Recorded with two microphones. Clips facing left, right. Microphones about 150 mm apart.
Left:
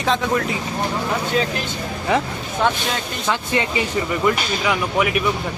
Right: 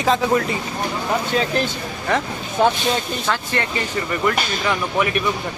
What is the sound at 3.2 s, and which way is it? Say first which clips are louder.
Speech: left 1 dB; 15° left (ahead or behind).